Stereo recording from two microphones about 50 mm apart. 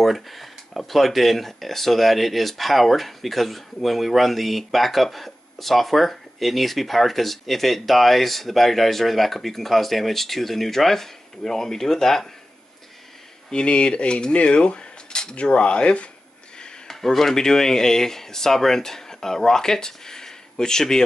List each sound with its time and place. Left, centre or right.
0.0 s speech: centre
13.5 s cutlery: centre
16.5 s a sound: centre
16.9 s speech: centre